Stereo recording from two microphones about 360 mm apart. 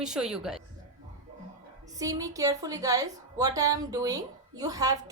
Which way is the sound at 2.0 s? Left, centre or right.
Centre.